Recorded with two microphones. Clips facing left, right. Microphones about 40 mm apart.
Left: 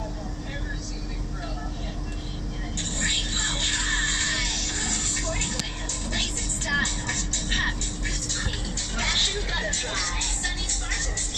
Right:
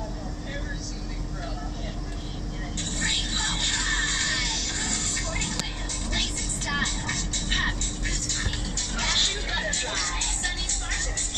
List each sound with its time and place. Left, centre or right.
3.0 s music: left
4.1 s music: left
6.7 s music: right
7.4 s music: centre
9.5 s music: centre
10.0 s music: right